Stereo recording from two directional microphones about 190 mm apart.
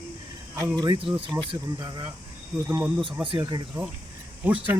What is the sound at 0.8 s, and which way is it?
Speech, 25° right (ahead or behind).